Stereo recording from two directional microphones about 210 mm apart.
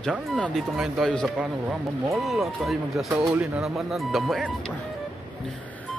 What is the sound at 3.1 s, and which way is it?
Speech, 10° right (ahead or behind).